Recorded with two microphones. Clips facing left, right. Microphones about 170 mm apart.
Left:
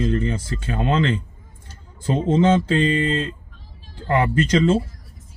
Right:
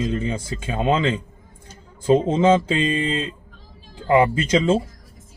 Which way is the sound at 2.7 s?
10° right (ahead or behind).